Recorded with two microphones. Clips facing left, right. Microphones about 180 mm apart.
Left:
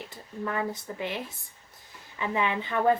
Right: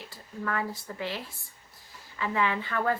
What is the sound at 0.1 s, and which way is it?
A woman's voice, 20° left (ahead or behind).